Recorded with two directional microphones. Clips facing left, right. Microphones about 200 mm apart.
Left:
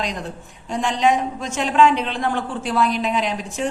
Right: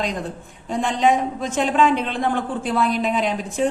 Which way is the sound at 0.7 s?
50° right (ahead or behind).